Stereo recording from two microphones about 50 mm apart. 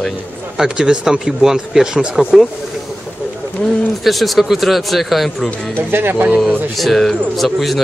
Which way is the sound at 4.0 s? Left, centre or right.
Centre.